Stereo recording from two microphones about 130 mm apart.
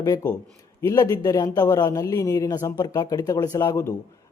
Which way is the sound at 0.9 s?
25° left (ahead or behind).